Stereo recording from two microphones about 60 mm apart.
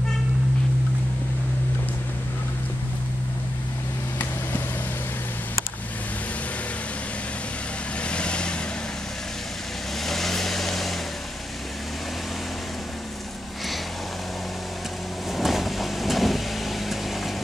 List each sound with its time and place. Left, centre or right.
8.0 s vehicle: centre
10.0 s vehicle: centre
15.3 s vehicle: centre